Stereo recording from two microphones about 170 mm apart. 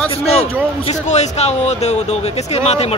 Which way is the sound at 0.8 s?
40° left (ahead or behind).